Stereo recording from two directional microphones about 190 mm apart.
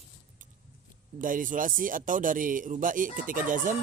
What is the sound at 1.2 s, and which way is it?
Speech, 45° right (ahead or behind).